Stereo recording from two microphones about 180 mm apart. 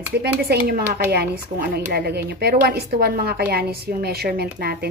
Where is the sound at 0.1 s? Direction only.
65° right (ahead or behind).